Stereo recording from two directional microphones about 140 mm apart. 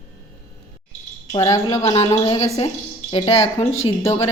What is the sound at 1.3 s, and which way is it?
A woman's voice, 30° left (ahead or behind).